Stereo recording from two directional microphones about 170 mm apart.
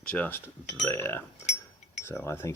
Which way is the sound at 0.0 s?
10° left (ahead or behind).